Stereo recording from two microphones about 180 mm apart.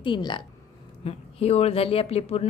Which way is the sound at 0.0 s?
25° left (ahead or behind).